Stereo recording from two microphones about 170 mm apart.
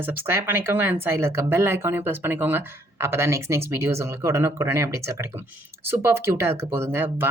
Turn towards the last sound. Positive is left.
turn(degrees=-15)  # may be behind; listen again after turning